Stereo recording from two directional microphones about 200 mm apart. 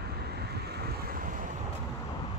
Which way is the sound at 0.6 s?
50° right (ahead or behind).